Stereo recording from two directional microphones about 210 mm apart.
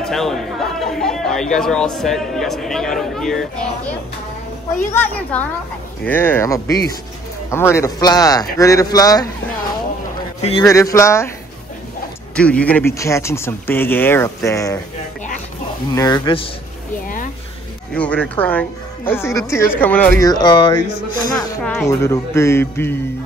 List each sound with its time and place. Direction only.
0.0 s speech: centre (ahead or behind)
4.9 s speech: 10° left (ahead or behind)
10.6 s speech: 15° left (ahead or behind)
12.4 s speech: 5° left (ahead or behind)
15.9 s speech: 20° left (ahead or behind)
17.9 s speech: 5° left (ahead or behind)
20.2 s speech: 20° left (ahead or behind)